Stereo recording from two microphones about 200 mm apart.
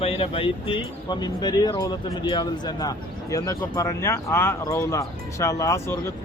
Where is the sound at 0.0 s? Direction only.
30° left (ahead or behind).